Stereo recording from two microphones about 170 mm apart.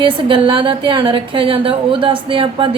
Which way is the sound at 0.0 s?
30° right (ahead or behind).